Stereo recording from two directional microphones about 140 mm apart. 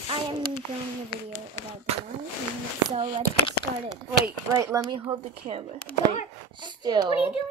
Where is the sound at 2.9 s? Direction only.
40° right (ahead or behind).